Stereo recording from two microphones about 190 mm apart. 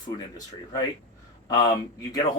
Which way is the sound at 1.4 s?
20° left (ahead or behind).